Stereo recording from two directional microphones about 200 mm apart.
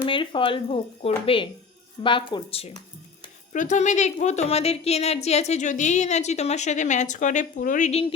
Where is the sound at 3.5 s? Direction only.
40° left (ahead or behind).